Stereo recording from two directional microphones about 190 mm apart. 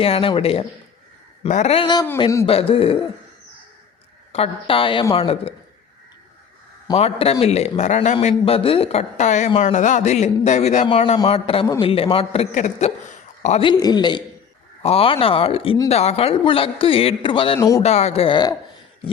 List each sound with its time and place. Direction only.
0.0 s a man's voice: 30° left (ahead or behind)
4.3 s a man's voice: 30° left (ahead or behind)
6.8 s a man's voice: 30° left (ahead or behind)
17.6 s speech: 15° left (ahead or behind)
17.8 s a man's voice: 35° left (ahead or behind)